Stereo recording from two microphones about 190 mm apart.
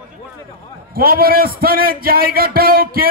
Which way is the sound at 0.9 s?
50° right (ahead or behind).